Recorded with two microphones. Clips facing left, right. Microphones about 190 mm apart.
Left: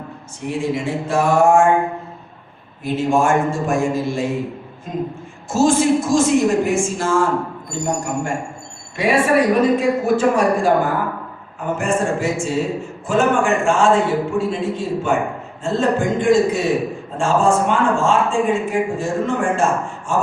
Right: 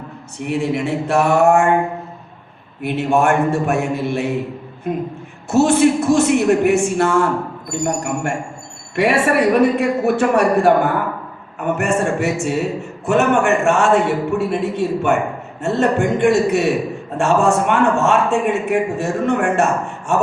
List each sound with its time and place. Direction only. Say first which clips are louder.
0.3 s a woman's voice: right 2 dB; 65° right (ahead or behind)
2.8 s a woman's voice: right 1 dB; 65° right (ahead or behind)
9.0 s a man's voice: even; 70° right (ahead or behind)